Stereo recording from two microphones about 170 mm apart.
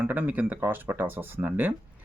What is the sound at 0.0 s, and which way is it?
Speech, 10° right (ahead or behind).